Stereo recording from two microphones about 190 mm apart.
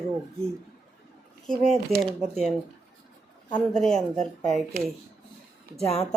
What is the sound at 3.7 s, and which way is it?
Speech, 5° left (ahead or behind).